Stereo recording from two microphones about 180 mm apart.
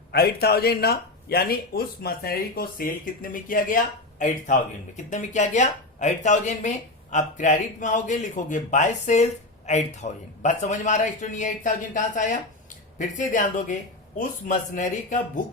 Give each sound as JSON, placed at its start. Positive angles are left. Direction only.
{"t": 0.1, "sound": "speech", "side_deg": 60}